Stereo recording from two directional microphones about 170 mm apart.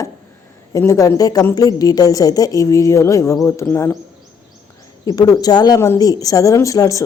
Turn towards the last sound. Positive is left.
turn(degrees=20)  # may be behind; listen again after turning